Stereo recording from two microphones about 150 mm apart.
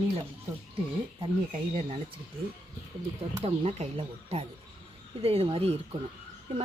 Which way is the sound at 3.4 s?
45° right (ahead or behind).